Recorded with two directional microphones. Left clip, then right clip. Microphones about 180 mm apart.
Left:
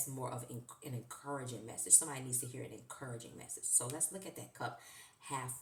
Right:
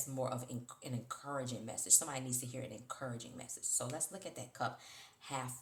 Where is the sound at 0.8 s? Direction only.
35° right (ahead or behind).